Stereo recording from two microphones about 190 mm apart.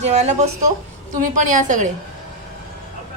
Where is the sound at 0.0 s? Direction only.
35° right (ahead or behind).